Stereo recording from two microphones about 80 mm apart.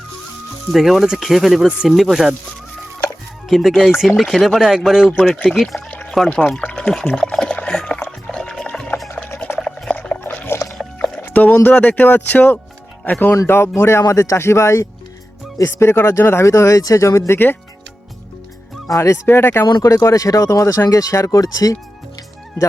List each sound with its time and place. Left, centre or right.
0.7 s speech: centre
3.5 s speech: centre
6.5 s speech: centre
6.7 s speech: centre
7.2 s pour: centre
8.3 s music: centre
9.6 s liquid: centre
10.2 s a sound: left
10.8 s music: centre
11.2 s speech: left
13.3 s speech: left
18.9 s speech: left
19.8 s speech: left